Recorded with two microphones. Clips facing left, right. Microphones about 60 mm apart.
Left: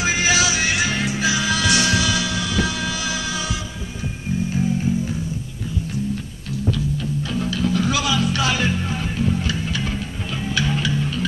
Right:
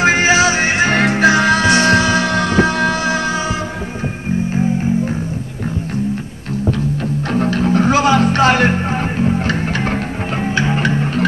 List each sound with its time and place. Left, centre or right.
0.0 s music: right
0.9 s music: right
4.5 s music: right
7.3 s music: right
10.4 s music: right